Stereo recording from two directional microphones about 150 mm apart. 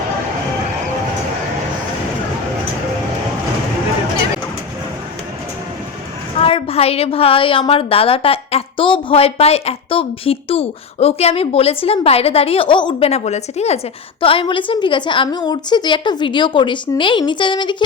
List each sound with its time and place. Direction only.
6.4 s a woman's voice: 40° left (ahead or behind)
13.1 s a woman's voice: 45° left (ahead or behind)